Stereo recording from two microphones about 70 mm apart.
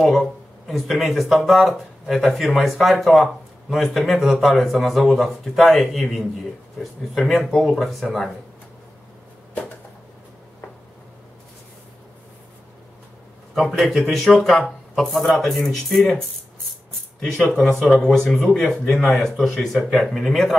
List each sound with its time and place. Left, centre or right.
0.0 s speech: centre
13.6 s speech: centre
17.2 s speech: centre